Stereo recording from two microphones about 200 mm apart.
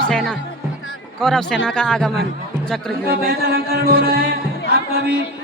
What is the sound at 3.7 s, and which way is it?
Music, 50° right (ahead or behind).